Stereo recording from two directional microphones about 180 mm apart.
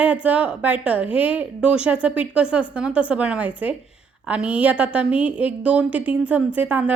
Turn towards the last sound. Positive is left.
turn(degrees=-10)  # may be behind; listen again after turning